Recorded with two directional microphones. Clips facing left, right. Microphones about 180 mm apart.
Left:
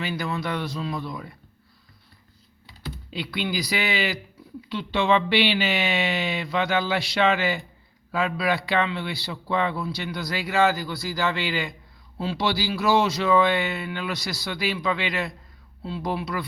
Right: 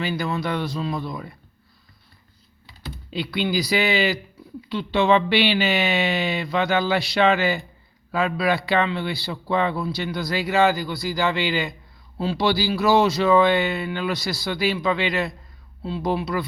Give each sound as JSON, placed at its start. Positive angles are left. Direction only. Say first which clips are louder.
{"t": 0.0, "sound": "a man's voice", "louder": "right 3 dB", "side_deg": -30}
{"t": 3.1, "sound": "a man's voice", "louder": "right 5 dB", "side_deg": -30}
{"t": 12.2, "sound": "a man's voice", "louder": "right 4 dB", "side_deg": -35}